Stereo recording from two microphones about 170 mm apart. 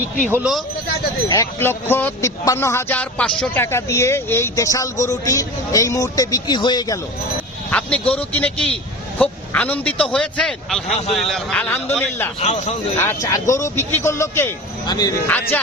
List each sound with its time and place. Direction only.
0.3 s speech: 10° right (ahead or behind)
1.3 s a man's voice: 15° left (ahead or behind)
7.7 s a man's voice: 10° left (ahead or behind)
12.4 s speech: 40° left (ahead or behind)
13.0 s a man's voice: 15° left (ahead or behind)
15.3 s a man's voice: 10° left (ahead or behind)